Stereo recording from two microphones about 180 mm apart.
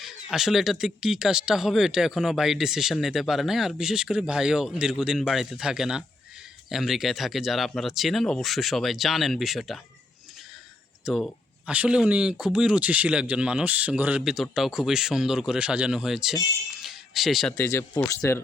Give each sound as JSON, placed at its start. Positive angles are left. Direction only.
{"t": 0.0, "sound": "speech", "side_deg": 0}
{"t": 11.0, "sound": "speech", "side_deg": 0}
{"t": 16.8, "sound": "a sound", "side_deg": 0}
{"t": 17.6, "sound": "speech", "side_deg": 15}